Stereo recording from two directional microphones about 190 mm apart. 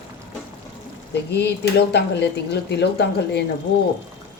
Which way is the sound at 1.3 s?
60° left (ahead or behind).